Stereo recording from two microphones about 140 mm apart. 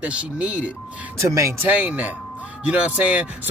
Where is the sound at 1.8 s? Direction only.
10° right (ahead or behind).